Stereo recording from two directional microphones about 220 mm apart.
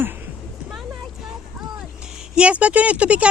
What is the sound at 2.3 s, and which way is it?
Speech, 5° right (ahead or behind).